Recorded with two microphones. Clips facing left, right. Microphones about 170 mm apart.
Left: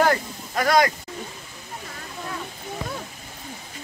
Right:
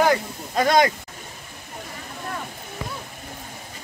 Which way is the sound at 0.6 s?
25° right (ahead or behind).